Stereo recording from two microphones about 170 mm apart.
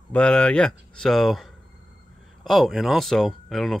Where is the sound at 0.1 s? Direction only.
5° left (ahead or behind).